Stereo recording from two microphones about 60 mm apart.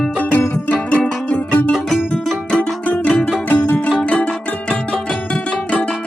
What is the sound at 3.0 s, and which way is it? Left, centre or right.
Music, centre.